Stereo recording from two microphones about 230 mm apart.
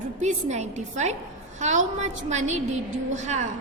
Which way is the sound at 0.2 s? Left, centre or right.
Right.